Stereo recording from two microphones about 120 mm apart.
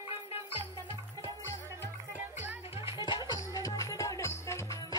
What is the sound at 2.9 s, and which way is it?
Music, 35° left (ahead or behind).